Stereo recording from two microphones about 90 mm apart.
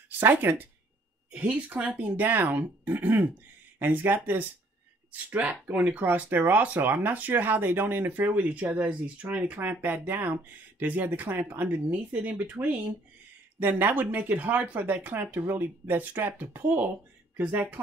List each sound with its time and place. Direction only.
0.2 s speech: 20° right (ahead or behind)